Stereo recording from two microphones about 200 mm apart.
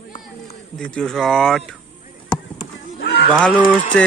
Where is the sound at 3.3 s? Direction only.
5° left (ahead or behind).